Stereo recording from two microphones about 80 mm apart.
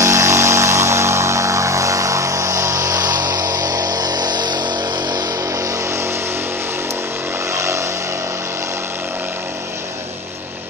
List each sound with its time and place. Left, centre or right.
0.0 s vehicle: right
5.6 s vehicle: right
7.5 s vehicle: right